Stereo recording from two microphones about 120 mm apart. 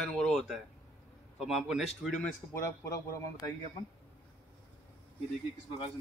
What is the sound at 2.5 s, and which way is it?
Speech, 25° left (ahead or behind).